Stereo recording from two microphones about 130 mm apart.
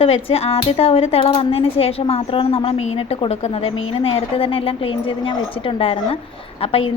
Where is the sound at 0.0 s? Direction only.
45° left (ahead or behind).